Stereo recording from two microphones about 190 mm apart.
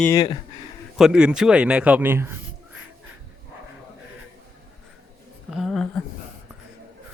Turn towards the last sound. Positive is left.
turn(degrees=0)  # may be behind; listen again after turning